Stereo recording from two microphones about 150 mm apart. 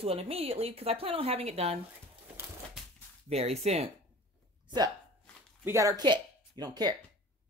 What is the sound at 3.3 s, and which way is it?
Speech, 45° right (ahead or behind).